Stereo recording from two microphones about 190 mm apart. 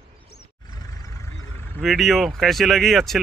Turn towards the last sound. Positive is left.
turn(degrees=0)  # may be behind; listen again after turning